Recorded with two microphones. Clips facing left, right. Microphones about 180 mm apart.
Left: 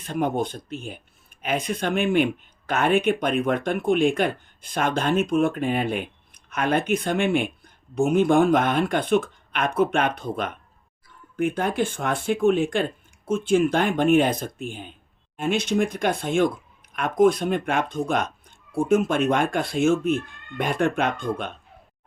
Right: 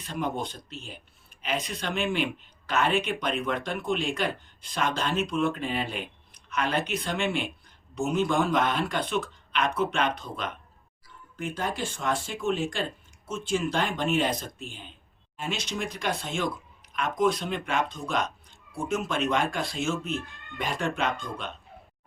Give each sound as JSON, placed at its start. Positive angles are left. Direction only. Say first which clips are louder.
{"t": 0.0, "sound": "speech", "louder": "left 7 dB", "side_deg": 55}